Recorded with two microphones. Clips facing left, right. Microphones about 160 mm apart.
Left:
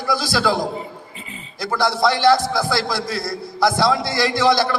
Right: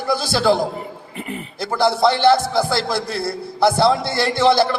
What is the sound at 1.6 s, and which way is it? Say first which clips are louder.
A man's voice: right 2 dB; 25° right (ahead or behind).